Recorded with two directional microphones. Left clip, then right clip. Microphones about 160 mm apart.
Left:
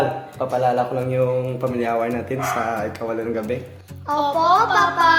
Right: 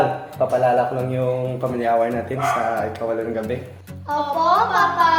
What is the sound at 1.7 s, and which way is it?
A man's voice, 45° left (ahead or behind).